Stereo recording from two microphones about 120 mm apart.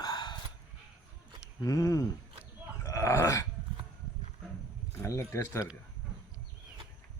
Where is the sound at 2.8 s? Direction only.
25° left (ahead or behind).